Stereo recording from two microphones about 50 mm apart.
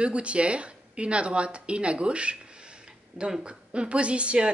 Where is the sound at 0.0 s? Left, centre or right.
Right.